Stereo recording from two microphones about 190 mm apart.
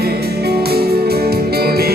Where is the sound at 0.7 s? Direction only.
55° right (ahead or behind).